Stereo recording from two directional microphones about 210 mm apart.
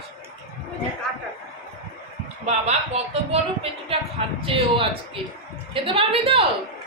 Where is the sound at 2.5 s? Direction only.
30° right (ahead or behind).